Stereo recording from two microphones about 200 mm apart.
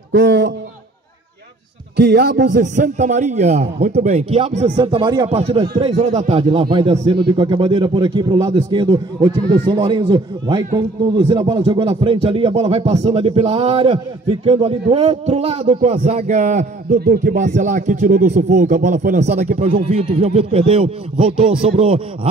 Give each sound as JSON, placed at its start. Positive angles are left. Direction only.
{"t": 0.1, "sound": "a man's voice", "side_deg": -60}
{"t": 2.0, "sound": "a man's voice", "side_deg": -55}
{"t": 2.5, "sound": "a man's voice", "side_deg": -40}